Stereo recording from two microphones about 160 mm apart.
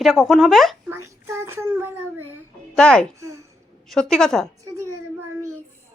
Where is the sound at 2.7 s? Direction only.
5° left (ahead or behind).